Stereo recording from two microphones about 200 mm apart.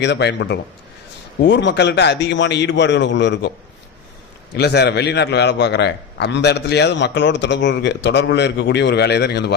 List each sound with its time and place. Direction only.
0.0 s a man's voice: 60° left (ahead or behind)
4.5 s a man's voice: 55° left (ahead or behind)